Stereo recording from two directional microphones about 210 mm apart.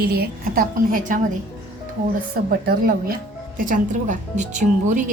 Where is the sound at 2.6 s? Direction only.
45° right (ahead or behind).